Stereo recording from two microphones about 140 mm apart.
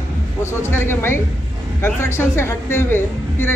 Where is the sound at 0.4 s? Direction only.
20° left (ahead or behind).